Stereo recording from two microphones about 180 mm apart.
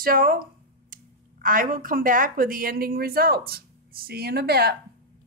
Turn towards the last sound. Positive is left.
turn(degrees=-60)  # may be behind; listen again after turning